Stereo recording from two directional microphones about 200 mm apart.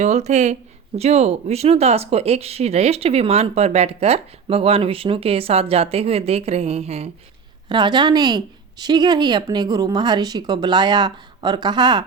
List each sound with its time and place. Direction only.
0.0 s a woman's voice: 35° right (ahead or behind)